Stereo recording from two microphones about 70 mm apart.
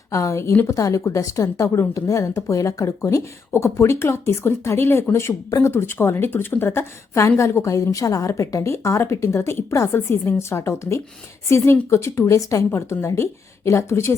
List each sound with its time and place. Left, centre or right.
0.1 s a woman's voice: left
5.5 s speech: left
5.7 s a woman's voice: left